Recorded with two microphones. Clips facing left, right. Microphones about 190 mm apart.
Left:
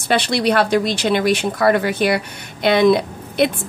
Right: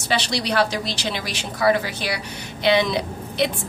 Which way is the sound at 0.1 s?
55° left (ahead or behind).